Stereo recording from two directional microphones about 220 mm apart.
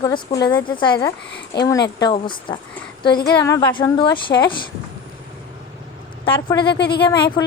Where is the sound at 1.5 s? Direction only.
50° left (ahead or behind).